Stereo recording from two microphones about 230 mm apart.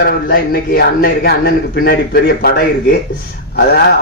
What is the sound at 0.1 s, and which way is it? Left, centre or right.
A man's voice, left.